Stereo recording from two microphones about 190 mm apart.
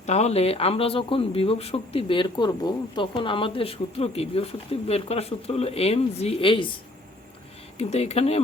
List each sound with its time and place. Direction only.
0.0 s speech: 35° left (ahead or behind)
7.8 s speech: 35° left (ahead or behind)